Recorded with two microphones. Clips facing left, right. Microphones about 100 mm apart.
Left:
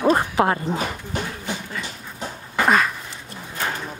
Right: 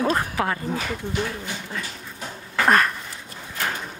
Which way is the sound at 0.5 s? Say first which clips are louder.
Left 3 dB; 25° left (ahead or behind).